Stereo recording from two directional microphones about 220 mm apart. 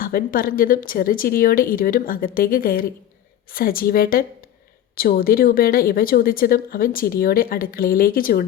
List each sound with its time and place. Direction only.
0.0 s a woman's voice: 40° left (ahead or behind)